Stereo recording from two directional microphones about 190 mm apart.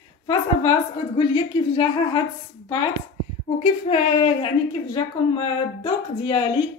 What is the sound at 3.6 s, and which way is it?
Speech, 30° left (ahead or behind).